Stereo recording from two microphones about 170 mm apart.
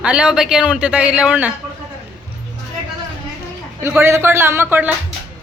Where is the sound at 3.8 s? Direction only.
15° right (ahead or behind).